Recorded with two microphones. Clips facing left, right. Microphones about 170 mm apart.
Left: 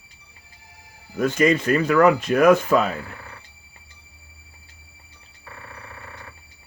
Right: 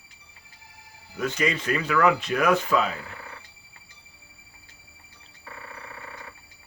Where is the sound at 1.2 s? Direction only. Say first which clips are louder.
Left 8 dB; 50° left (ahead or behind).